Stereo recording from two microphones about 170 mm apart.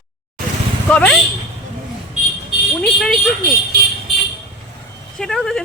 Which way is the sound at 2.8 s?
5° left (ahead or behind).